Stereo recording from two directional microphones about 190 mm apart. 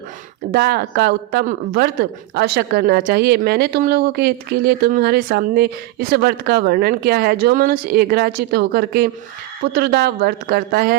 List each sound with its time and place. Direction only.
0.5 s speech: 55° right (ahead or behind)